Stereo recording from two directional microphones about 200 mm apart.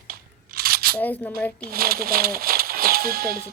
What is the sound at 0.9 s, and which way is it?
Speech, 10° left (ahead or behind).